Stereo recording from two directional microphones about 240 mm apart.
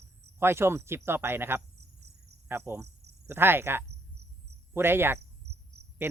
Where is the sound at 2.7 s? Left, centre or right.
Centre.